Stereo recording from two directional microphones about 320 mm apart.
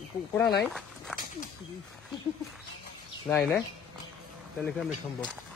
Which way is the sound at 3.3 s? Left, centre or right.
Centre.